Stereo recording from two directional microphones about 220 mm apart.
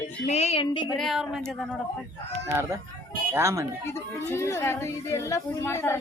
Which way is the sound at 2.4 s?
10° right (ahead or behind).